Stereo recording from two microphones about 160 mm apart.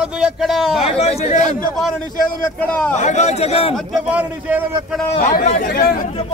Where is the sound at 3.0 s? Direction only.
45° left (ahead or behind).